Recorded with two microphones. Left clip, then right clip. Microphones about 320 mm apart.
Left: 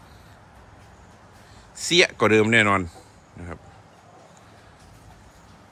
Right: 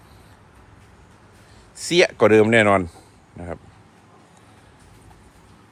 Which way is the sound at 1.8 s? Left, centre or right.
Centre.